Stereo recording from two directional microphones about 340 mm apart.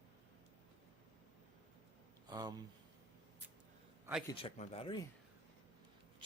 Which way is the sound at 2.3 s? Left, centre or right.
Centre.